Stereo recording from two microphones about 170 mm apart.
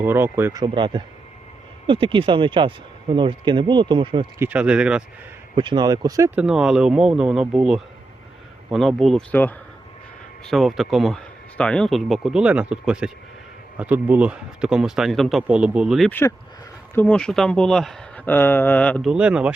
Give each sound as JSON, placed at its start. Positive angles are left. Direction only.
{"t": 0.0, "sound": "speech", "side_deg": -15}
{"t": 0.6, "sound": "speech", "side_deg": -30}
{"t": 4.4, "sound": "speech", "side_deg": -10}
{"t": 5.5, "sound": "speech", "side_deg": -25}
{"t": 6.3, "sound": "speech", "side_deg": -5}
{"t": 9.3, "sound": "speech", "side_deg": 10}
{"t": 10.4, "sound": "speech", "side_deg": 0}
{"t": 16.0, "sound": "speech", "side_deg": 10}
{"t": 19.1, "sound": "speech", "side_deg": -5}